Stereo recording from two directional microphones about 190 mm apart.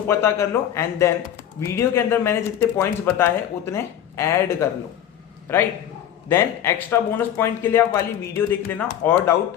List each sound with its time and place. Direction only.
0.1 s speech: 15° left (ahead or behind)